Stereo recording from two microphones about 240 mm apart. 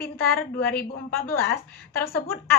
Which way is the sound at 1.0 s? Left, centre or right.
Centre.